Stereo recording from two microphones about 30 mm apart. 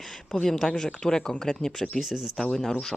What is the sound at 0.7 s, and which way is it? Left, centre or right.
A woman's voice, left.